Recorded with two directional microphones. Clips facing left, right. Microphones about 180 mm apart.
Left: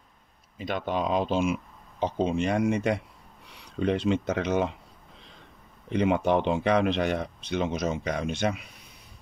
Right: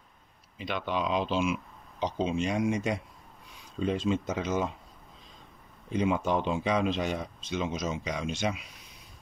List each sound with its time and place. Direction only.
0.6 s speech: 45° left (ahead or behind); by 4.7 s 65° left (ahead or behind)
5.9 s speech: 65° left (ahead or behind)